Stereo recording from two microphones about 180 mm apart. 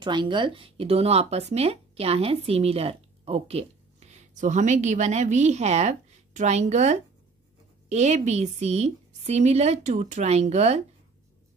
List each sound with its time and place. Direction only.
0.0 s a woman's voice: 25° right (ahead or behind)